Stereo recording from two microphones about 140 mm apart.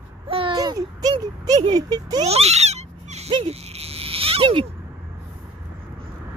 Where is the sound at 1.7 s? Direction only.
30° right (ahead or behind).